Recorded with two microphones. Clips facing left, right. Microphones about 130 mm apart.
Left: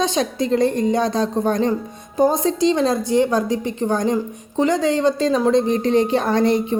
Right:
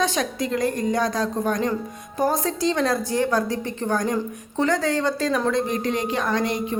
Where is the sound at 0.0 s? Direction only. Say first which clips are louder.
Left 4 dB; 25° left (ahead or behind).